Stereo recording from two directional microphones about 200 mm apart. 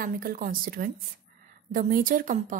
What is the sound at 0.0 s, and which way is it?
A woman's voice, 45° right (ahead or behind).